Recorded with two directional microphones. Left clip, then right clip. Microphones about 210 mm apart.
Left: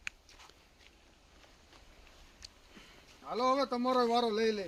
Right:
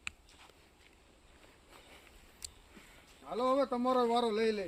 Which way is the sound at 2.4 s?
50° right (ahead or behind).